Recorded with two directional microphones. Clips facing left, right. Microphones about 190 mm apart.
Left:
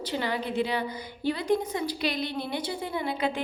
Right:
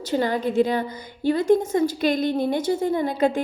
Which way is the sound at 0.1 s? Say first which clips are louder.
Right 8 dB; 45° right (ahead or behind).